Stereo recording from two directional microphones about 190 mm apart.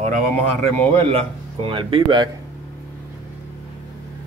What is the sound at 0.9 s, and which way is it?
Speech, 30° right (ahead or behind).